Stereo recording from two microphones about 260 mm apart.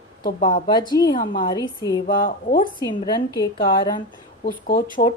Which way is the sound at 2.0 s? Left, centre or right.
Left.